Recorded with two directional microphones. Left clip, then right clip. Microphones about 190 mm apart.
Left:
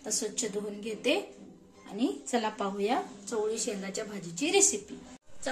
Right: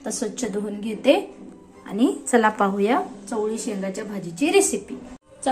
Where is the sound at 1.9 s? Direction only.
5° right (ahead or behind).